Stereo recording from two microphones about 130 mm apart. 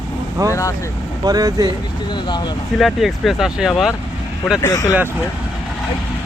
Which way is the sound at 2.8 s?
Centre (ahead or behind).